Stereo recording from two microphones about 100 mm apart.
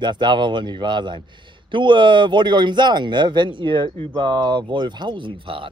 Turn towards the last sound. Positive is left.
turn(degrees=-60)  # may be behind; listen again after turning